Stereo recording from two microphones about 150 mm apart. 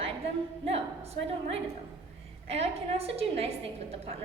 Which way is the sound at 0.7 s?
40° right (ahead or behind).